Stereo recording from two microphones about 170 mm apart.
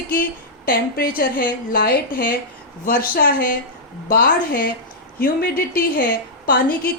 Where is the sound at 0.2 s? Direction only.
60° left (ahead or behind).